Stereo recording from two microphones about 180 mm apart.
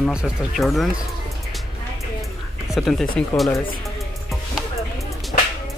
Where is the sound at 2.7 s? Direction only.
Centre (ahead or behind).